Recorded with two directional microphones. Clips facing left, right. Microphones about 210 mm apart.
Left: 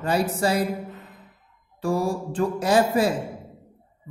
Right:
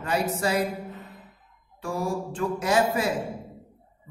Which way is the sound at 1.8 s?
35° left (ahead or behind).